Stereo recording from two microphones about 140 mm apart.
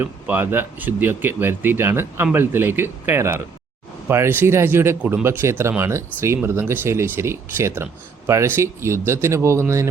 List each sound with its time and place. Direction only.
0.0 s speech: 15° right (ahead or behind)